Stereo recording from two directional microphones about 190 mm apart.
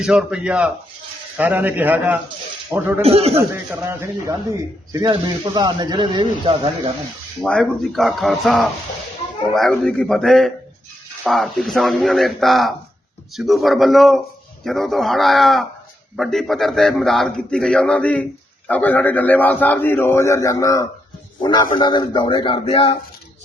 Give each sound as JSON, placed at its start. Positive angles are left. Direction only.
{"t": 0.0, "sound": "a man's voice", "side_deg": -5}
{"t": 3.0, "sound": "speech", "side_deg": -30}
{"t": 3.3, "sound": "a man's voice", "side_deg": -15}
{"t": 7.4, "sound": "a man's voice", "side_deg": 5}